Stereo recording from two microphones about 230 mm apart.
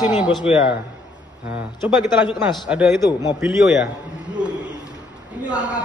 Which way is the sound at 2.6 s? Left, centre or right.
Centre.